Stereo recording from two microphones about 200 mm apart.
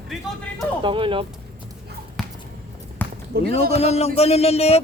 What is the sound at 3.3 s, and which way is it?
Speech, 50° right (ahead or behind).